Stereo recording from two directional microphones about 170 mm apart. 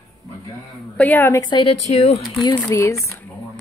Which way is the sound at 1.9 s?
40° left (ahead or behind).